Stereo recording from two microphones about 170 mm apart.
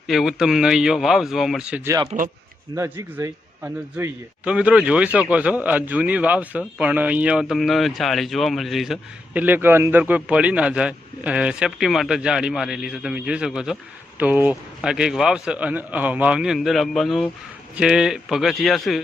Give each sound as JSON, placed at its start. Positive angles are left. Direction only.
{"t": 0.1, "sound": "a man's voice", "side_deg": 0}
{"t": 2.1, "sound": "a man's voice", "side_deg": -40}
{"t": 2.7, "sound": "a man's voice", "side_deg": -15}